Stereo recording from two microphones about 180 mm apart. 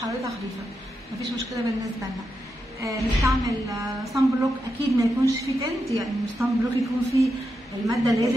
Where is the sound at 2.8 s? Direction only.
15° right (ahead or behind).